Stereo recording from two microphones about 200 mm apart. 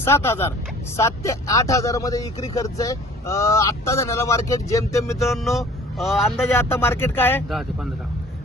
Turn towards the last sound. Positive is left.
turn(degrees=0)  # may be behind; listen again after turning